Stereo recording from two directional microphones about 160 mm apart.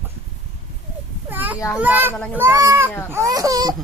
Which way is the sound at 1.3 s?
10° right (ahead or behind).